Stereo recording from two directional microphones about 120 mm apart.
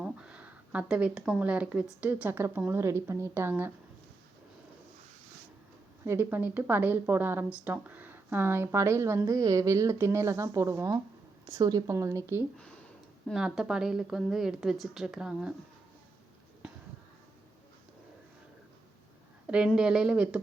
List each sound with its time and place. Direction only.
0.0 s speech: 10° right (ahead or behind)
6.1 s a woman's voice: 15° right (ahead or behind)
13.2 s a woman's voice: 5° right (ahead or behind)
19.5 s a woman's voice: 10° right (ahead or behind)